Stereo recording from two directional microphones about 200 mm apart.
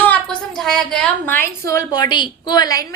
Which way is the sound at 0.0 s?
5° left (ahead or behind).